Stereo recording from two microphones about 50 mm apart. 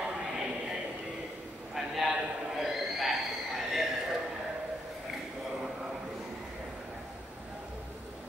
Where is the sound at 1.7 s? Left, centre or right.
Centre.